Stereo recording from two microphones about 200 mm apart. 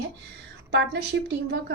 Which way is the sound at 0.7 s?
60° right (ahead or behind).